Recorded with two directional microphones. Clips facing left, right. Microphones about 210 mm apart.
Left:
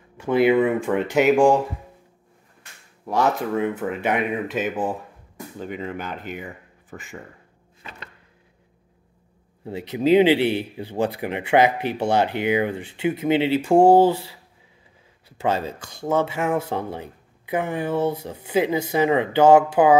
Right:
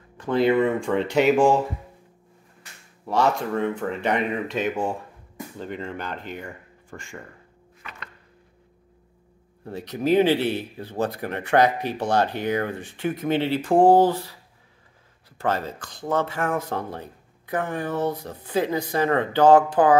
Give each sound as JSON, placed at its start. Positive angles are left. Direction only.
{"t": 0.2, "sound": "speech", "side_deg": 10}
{"t": 3.1, "sound": "speech", "side_deg": 0}
{"t": 7.8, "sound": "chopping", "side_deg": 25}
{"t": 9.7, "sound": "speech", "side_deg": 10}
{"t": 15.4, "sound": "speech", "side_deg": 10}